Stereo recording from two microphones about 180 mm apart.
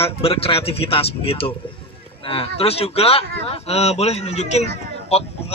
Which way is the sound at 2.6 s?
35° left (ahead or behind).